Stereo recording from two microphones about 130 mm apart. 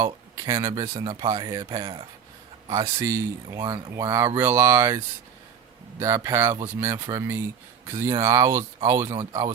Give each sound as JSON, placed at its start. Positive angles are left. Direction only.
{"t": 0.0, "sound": "speech", "side_deg": -25}
{"t": 1.8, "sound": "speech", "side_deg": -45}
{"t": 2.6, "sound": "speech", "side_deg": -25}
{"t": 6.0, "sound": "speech", "side_deg": -20}